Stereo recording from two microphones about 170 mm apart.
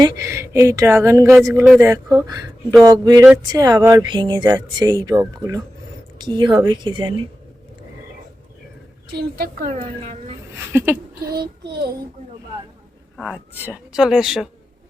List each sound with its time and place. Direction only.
0.0 s speech: 15° right (ahead or behind)
9.0 s a woman's voice: 70° right (ahead or behind)
9.7 s speech: 40° right (ahead or behind)
10.7 s speech: 15° right (ahead or behind)
11.3 s a woman's voice: 70° right (ahead or behind)
13.1 s a woman's voice: 5° right (ahead or behind)